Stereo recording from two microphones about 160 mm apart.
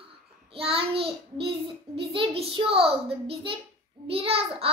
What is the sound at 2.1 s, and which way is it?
A child's voice, 35° right (ahead or behind).